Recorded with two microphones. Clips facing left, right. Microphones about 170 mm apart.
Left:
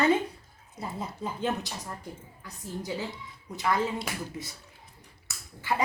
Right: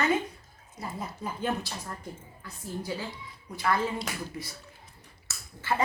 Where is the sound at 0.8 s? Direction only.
20° left (ahead or behind).